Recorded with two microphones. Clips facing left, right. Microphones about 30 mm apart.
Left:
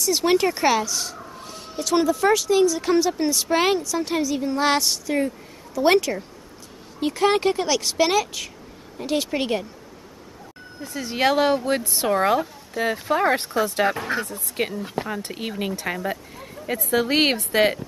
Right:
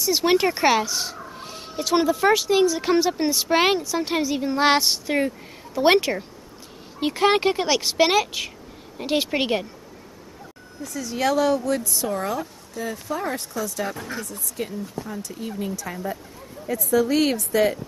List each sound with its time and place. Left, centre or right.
0.0 s speech: centre
10.8 s speech: left